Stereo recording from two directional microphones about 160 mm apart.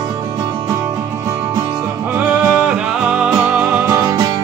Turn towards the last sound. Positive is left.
turn(degrees=-20)  # may be behind; listen again after turning